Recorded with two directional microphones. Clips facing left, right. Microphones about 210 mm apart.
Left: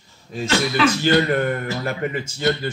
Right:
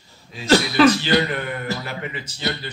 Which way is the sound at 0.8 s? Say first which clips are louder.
Right 5 dB; 40° right (ahead or behind).